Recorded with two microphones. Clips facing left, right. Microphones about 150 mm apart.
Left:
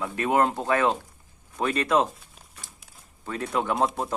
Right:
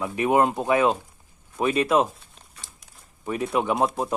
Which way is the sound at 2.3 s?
5° left (ahead or behind).